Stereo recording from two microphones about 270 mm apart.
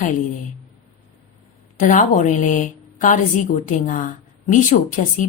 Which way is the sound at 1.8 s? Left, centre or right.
Left.